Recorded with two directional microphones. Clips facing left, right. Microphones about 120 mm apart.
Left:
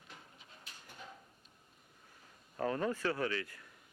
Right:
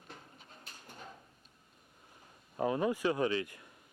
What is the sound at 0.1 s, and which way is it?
Pigeon, 40° right (ahead or behind).